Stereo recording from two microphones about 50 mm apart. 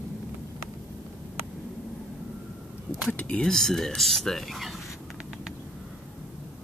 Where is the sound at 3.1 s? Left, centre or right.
Left.